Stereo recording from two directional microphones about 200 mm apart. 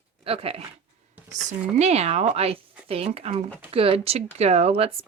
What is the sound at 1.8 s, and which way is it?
Speech, 30° right (ahead or behind).